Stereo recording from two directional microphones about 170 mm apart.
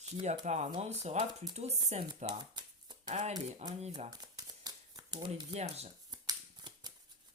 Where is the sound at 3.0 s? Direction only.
40° right (ahead or behind).